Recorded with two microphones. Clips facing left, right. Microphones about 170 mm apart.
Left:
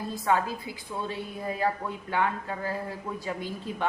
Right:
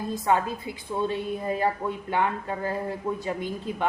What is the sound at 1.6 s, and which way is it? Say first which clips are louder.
A woman's voice: right 3 dB; 25° right (ahead or behind).